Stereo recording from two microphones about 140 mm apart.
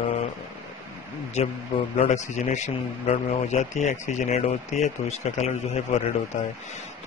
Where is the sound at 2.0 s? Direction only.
55° left (ahead or behind).